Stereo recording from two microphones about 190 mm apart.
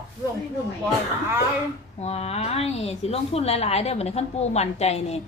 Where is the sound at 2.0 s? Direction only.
35° left (ahead or behind).